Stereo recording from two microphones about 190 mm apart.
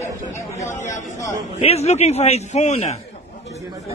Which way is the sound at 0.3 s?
15° left (ahead or behind).